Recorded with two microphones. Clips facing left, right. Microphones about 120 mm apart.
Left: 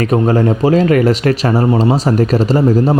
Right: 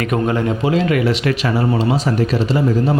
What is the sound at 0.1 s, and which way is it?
Speech, 35° left (ahead or behind).